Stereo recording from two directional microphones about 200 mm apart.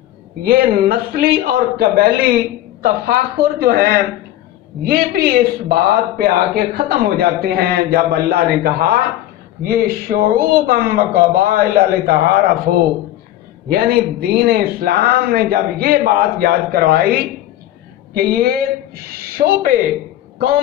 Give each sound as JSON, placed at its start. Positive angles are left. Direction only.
{"t": 0.4, "sound": "a man's voice", "side_deg": -50}
{"t": 13.7, "sound": "a man's voice", "side_deg": -50}